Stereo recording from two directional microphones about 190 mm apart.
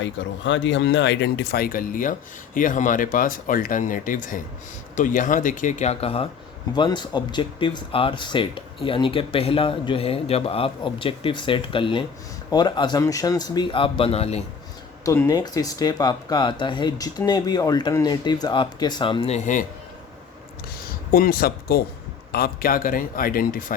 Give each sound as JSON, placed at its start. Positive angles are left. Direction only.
{"t": 0.0, "sound": "speech", "side_deg": 75}
{"t": 15.0, "sound": "speech", "side_deg": 15}
{"t": 21.1, "sound": "speech", "side_deg": 50}